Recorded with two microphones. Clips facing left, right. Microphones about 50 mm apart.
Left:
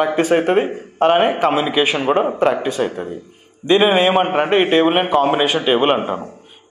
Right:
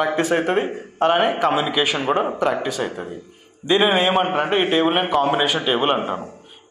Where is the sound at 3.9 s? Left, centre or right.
Left.